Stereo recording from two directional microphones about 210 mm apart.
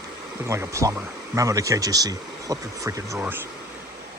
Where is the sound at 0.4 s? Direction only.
15° right (ahead or behind).